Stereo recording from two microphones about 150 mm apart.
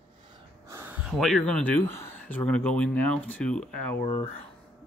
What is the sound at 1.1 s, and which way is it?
Speech, 5° left (ahead or behind).